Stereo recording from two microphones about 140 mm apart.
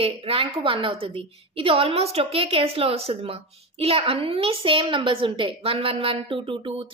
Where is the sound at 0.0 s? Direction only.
45° right (ahead or behind).